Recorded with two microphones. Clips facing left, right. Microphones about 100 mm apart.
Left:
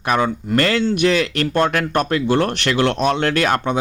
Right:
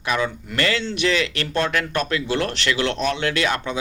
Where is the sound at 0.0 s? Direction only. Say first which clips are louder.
Left 5 dB; 45° left (ahead or behind).